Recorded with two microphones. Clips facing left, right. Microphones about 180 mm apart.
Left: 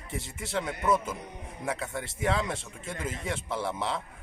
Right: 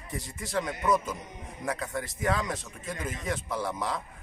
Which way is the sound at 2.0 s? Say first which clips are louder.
Left 1 dB; 25° left (ahead or behind).